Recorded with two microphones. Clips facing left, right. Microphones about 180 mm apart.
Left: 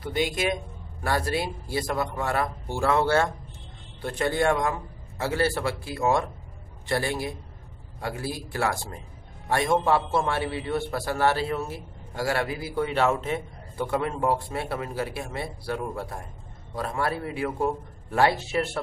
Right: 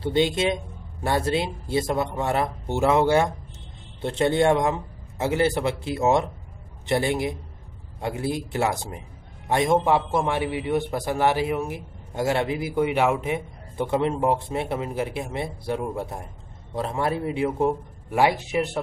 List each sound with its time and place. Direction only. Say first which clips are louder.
0.0 s a man's voice: right 5 dB; 25° right (ahead or behind)